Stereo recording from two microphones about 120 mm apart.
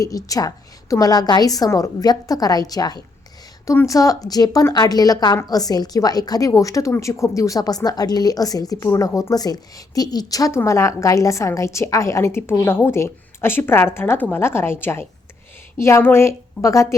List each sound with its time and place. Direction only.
0.0 s a woman's voice: 30° left (ahead or behind)